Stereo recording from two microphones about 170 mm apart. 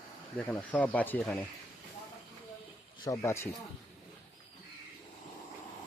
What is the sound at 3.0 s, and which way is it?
Speech, 20° left (ahead or behind).